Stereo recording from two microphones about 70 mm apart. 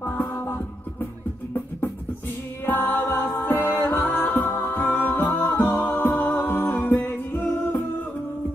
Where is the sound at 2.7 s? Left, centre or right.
Left.